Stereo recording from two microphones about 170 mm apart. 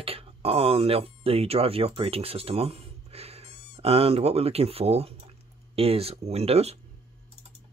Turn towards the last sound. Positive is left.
turn(degrees=-35)  # may be behind; listen again after turning